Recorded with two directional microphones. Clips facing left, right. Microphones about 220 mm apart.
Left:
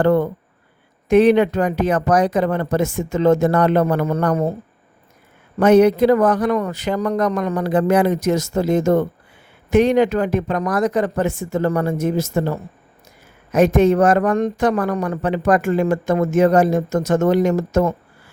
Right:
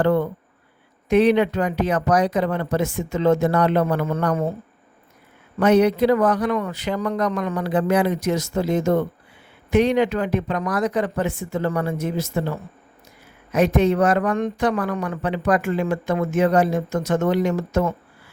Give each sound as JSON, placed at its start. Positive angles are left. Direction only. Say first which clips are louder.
{"t": 0.0, "sound": "speech", "louder": "left 3 dB", "side_deg": 45}
{"t": 5.5, "sound": "speech", "louder": "left 4 dB", "side_deg": 45}